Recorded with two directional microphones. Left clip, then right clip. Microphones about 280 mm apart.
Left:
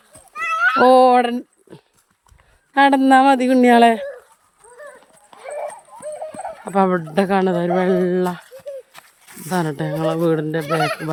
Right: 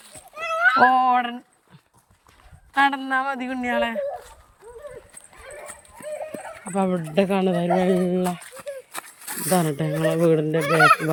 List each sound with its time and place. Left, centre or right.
0.8 s speech: centre
6.7 s speech: centre
8.5 s a sound: centre
9.5 s speech: centre
10.7 s speech: centre